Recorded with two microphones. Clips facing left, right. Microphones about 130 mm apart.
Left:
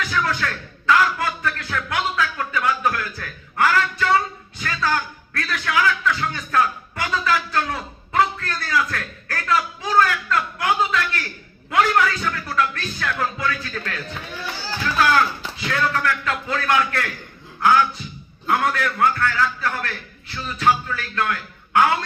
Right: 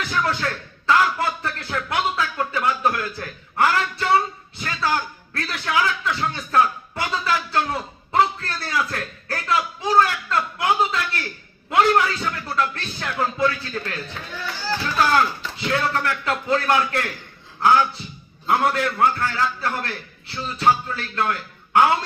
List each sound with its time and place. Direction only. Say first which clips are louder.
0.1 s music: right 3 dB; 30° right (ahead or behind)
4.6 s a sound: even; 25° right (ahead or behind)
11.7 s speech: right 1 dB; 25° right (ahead or behind)
15.6 s a man's voice: even; 30° right (ahead or behind)